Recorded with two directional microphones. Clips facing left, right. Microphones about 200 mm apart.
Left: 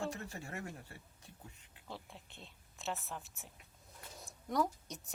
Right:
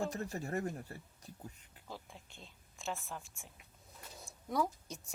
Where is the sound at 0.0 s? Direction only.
35° right (ahead or behind).